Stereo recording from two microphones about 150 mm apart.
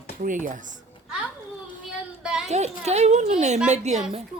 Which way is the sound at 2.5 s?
50° right (ahead or behind).